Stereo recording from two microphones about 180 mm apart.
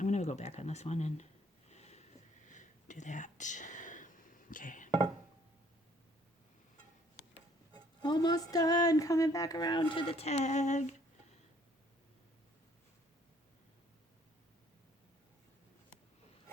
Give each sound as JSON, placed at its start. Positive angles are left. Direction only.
{"t": 0.0, "sound": "a sound", "side_deg": 40}
{"t": 2.5, "sound": "whispering", "side_deg": 45}
{"t": 8.0, "sound": "speech", "side_deg": 25}